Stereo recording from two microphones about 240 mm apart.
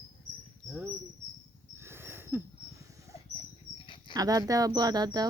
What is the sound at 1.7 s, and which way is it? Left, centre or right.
Dog, centre.